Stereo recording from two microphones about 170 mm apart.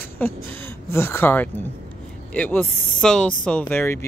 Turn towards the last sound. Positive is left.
turn(degrees=10)  # may be behind; listen again after turning